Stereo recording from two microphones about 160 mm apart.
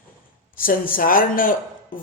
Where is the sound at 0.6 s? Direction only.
60° left (ahead or behind).